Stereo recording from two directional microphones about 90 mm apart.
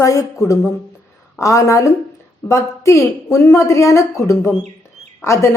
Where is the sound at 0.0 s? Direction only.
35° left (ahead or behind).